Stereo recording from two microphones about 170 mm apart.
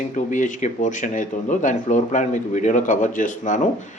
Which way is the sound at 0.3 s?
50° left (ahead or behind).